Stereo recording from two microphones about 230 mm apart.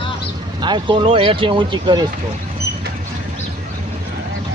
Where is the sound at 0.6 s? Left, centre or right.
Centre.